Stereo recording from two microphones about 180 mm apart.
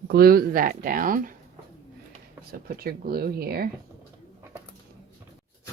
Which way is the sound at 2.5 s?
60° right (ahead or behind).